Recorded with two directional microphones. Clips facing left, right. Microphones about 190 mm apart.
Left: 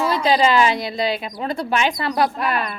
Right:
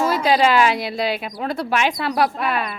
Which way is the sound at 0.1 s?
5° right (ahead or behind).